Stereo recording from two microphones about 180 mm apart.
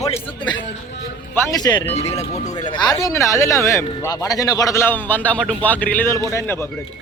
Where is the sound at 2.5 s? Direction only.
25° left (ahead or behind).